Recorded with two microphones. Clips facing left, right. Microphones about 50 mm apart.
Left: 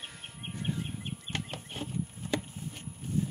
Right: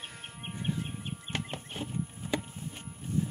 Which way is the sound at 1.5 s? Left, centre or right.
Centre.